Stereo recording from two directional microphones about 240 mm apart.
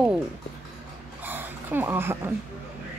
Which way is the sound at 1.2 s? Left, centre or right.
Centre.